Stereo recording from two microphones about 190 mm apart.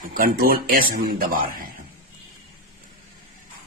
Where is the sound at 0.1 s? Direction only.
50° right (ahead or behind).